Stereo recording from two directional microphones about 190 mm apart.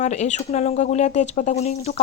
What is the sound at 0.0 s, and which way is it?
Speech, 40° left (ahead or behind).